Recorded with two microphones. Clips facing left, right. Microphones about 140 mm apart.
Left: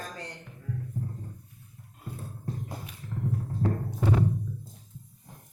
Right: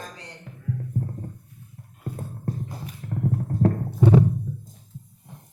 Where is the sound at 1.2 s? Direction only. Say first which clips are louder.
Right 6 dB; 55° right (ahead or behind).